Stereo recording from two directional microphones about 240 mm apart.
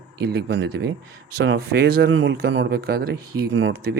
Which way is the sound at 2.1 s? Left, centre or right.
Right.